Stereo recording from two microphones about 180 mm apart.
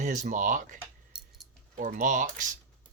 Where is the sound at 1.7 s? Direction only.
45° right (ahead or behind).